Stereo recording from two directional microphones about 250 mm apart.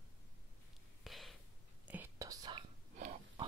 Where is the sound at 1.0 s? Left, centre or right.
Centre.